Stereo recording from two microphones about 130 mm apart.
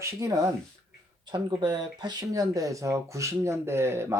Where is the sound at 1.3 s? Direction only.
35° right (ahead or behind).